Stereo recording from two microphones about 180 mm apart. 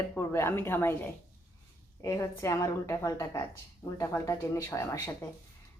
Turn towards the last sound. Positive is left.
turn(degrees=15)  # may be behind; listen again after turning